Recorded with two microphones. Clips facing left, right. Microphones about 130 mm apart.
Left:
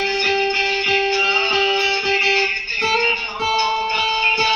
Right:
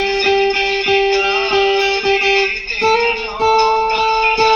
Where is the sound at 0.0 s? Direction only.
55° right (ahead or behind).